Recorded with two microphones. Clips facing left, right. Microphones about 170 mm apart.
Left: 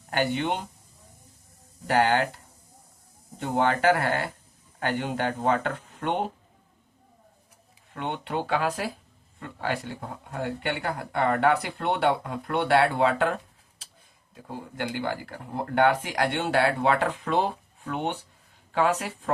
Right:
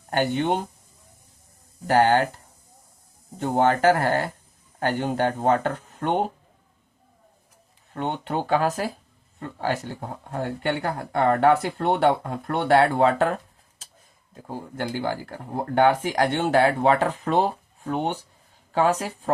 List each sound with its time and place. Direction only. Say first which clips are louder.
0.2 s speech: right 3 dB; 45° right (ahead or behind)
1.9 s speech: right 4 dB; 45° right (ahead or behind)
3.3 s speech: right 4 dB; 45° right (ahead or behind)
7.9 s speech: right 3 dB; 40° right (ahead or behind)
14.8 s speech: right 2 dB; 40° right (ahead or behind)